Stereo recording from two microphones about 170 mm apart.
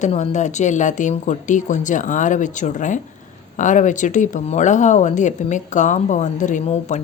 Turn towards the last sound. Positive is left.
turn(degrees=40)  # may be behind; listen again after turning